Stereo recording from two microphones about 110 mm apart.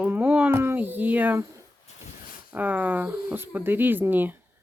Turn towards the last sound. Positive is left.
turn(degrees=-15)  # may be behind; listen again after turning